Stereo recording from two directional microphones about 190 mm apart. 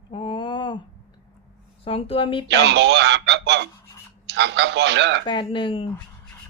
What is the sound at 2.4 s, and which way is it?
Speech, 65° right (ahead or behind).